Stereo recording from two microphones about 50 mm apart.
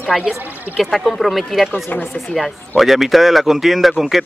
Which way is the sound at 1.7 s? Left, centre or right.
Left.